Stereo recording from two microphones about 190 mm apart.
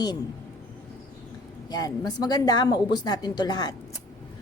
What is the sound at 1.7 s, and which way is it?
A woman's voice, 20° left (ahead or behind).